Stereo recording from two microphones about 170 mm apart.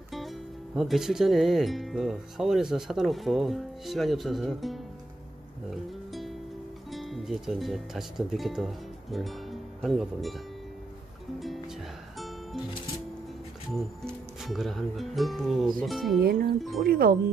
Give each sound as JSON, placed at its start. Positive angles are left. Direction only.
{"t": 0.7, "sound": "speech", "side_deg": 0}
{"t": 5.7, "sound": "music", "side_deg": 0}
{"t": 6.9, "sound": "speech", "side_deg": 0}
{"t": 13.7, "sound": "speech", "side_deg": 0}
{"t": 16.2, "sound": "speech", "side_deg": -65}